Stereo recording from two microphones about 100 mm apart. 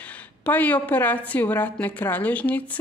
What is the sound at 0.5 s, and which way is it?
Speech, 15° left (ahead or behind).